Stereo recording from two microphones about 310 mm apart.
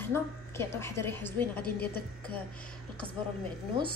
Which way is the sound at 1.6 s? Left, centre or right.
Left.